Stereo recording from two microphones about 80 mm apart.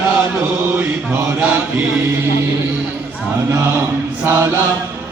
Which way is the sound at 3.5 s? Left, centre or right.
Right.